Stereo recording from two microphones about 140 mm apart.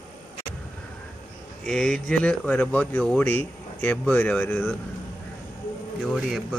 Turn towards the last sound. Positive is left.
turn(degrees=-5)  # may be behind; listen again after turning